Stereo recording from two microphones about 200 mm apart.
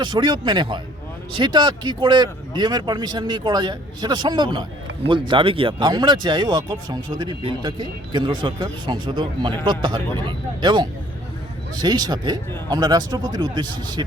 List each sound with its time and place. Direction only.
0.0 s speech: 25° right (ahead or behind)